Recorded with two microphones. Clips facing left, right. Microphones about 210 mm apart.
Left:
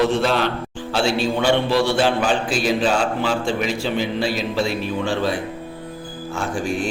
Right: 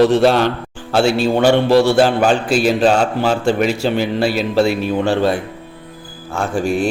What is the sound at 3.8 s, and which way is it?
A man's voice, 65° right (ahead or behind).